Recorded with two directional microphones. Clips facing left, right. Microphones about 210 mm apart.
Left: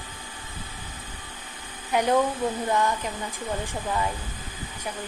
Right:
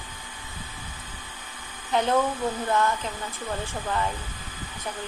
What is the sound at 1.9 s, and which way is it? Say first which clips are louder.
Speech: left 1 dB; 15° left (ahead or behind).